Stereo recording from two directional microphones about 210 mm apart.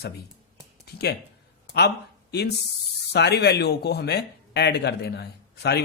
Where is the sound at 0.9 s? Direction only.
50° left (ahead or behind).